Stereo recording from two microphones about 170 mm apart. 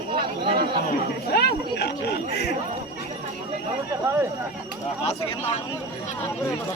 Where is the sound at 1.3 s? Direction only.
75° left (ahead or behind).